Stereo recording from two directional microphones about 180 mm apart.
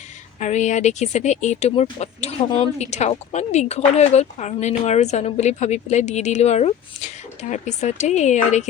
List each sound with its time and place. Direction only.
0.3 s speech: 40° left (ahead or behind)